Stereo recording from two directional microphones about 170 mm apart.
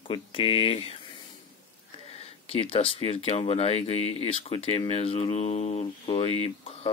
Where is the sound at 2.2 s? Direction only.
35° left (ahead or behind).